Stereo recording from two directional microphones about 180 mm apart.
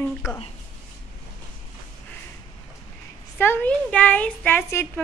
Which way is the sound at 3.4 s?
10° left (ahead or behind).